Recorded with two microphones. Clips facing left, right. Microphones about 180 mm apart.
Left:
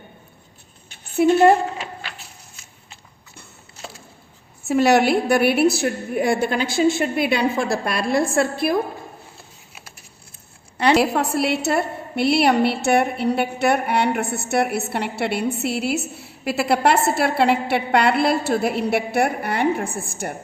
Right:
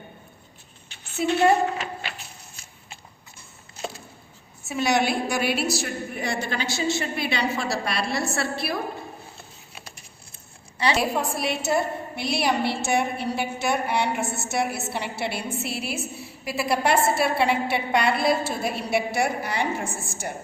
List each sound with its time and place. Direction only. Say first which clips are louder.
1.1 s a woman's voice: left 6 dB; 50° left (ahead or behind)
4.6 s a woman's voice: left 7 dB; 65° left (ahead or behind); by 8.7 s 50° left (ahead or behind)
10.8 s a woman's voice: left 6 dB; 65° left (ahead or behind)